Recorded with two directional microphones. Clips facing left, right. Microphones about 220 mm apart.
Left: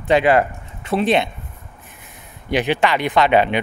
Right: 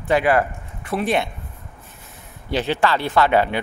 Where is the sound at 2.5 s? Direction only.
15° left (ahead or behind).